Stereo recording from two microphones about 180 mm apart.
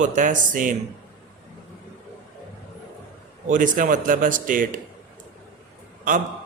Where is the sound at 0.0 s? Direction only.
45° right (ahead or behind).